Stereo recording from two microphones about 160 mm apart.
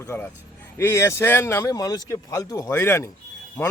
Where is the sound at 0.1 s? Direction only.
15° left (ahead or behind).